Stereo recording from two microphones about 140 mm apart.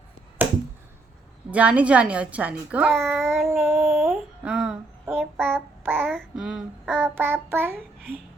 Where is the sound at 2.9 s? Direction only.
Centre (ahead or behind).